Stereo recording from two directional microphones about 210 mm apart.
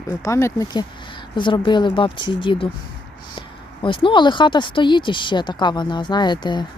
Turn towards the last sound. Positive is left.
turn(degrees=20)  # may be behind; listen again after turning